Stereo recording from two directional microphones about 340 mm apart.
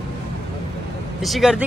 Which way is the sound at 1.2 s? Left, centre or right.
Centre.